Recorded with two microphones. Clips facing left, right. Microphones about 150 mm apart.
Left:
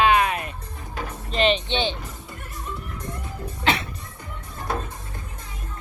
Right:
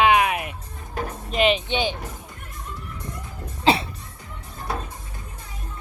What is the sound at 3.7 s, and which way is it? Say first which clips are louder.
Music: right 4 dB; 30° right (ahead or behind).